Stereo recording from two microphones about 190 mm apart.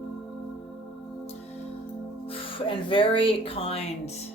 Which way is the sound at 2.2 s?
30° left (ahead or behind).